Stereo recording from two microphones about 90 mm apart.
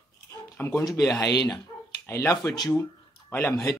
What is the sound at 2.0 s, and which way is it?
Speech, 30° left (ahead or behind).